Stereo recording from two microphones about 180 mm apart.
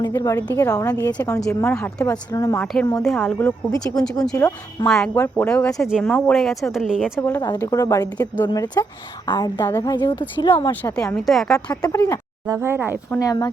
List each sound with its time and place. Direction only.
0.1 s a woman's voice: 15° left (ahead or behind)
2.7 s speech: centre (ahead or behind)
3.3 s a woman's voice: 15° left (ahead or behind)
3.8 s speech: 5° left (ahead or behind)
4.4 s a woman's voice: 15° left (ahead or behind)
4.9 s speech: 5° left (ahead or behind)
7.2 s a woman's voice: 10° left (ahead or behind)
10.5 s speech: 10° left (ahead or behind)
11.9 s a woman's voice: 15° left (ahead or behind)
12.5 s speech: 15° right (ahead or behind)
13.1 s a woman's voice: 20° left (ahead or behind)